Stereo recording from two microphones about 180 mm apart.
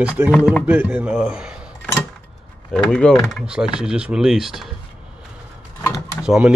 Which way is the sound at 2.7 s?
5° left (ahead or behind).